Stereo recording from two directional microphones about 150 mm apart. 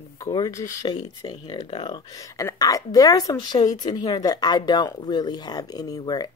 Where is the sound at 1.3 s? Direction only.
30° left (ahead or behind).